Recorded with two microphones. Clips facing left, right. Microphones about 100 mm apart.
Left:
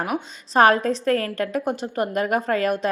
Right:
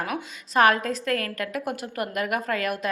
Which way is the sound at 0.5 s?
35° left (ahead or behind).